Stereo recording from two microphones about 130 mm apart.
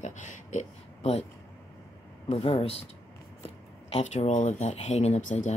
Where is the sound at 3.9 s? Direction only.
55° left (ahead or behind); by 5.5 s 70° left (ahead or behind).